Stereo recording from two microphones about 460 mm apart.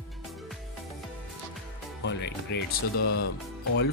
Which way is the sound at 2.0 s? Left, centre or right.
Left.